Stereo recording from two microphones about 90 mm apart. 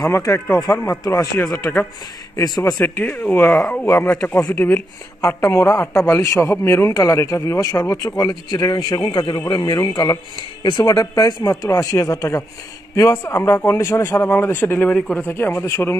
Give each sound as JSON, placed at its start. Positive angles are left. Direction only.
{"t": 0.0, "sound": "a man's voice", "side_deg": 35}
{"t": 2.8, "sound": "speech", "side_deg": 20}
{"t": 3.4, "sound": "speech", "side_deg": 5}
{"t": 3.8, "sound": "a man's voice", "side_deg": 30}
{"t": 15.0, "sound": "speech", "side_deg": 10}
{"t": 15.2, "sound": "speech", "side_deg": 25}